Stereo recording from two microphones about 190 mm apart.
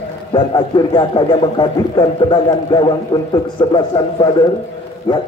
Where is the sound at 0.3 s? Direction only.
25° left (ahead or behind).